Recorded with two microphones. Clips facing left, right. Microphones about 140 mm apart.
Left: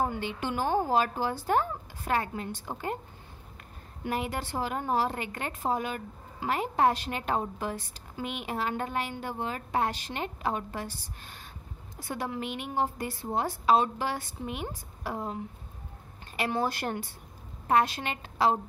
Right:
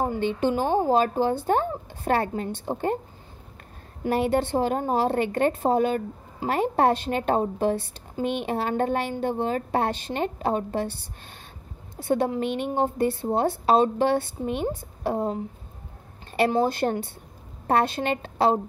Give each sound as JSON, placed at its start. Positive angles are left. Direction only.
{"t": 0.0, "sound": "a woman's voice", "side_deg": -25}
{"t": 4.0, "sound": "a woman's voice", "side_deg": -35}
{"t": 16.3, "sound": "a woman's voice", "side_deg": -30}